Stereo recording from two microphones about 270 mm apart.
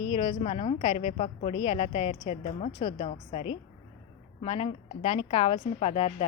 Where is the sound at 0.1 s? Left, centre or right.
Centre.